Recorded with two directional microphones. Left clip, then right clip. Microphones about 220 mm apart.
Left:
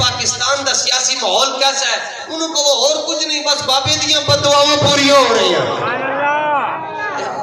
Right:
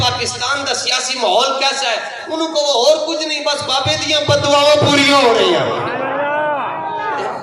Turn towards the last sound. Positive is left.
turn(degrees=35)  # may be behind; listen again after turning